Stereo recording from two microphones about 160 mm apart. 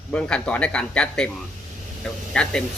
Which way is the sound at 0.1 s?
5° left (ahead or behind).